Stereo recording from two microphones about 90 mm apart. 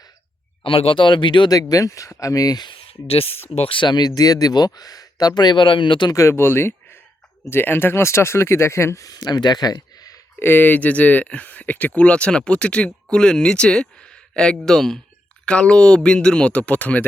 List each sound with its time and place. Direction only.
0.6 s speech: 85° left; by 1.5 s 60° left (ahead or behind)
1.7 s speech: 35° left (ahead or behind)
2.7 s speech: 90° left
3.6 s speech: 75° left (ahead or behind)
6.1 s speech: 30° left (ahead or behind)
9.0 s speech: 50° left (ahead or behind)
10.4 s speech: 20° left (ahead or behind)